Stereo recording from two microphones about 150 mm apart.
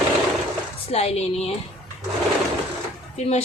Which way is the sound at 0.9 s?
45° left (ahead or behind).